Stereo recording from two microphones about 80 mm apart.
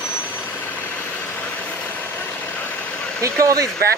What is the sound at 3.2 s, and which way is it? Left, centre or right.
Speech, right.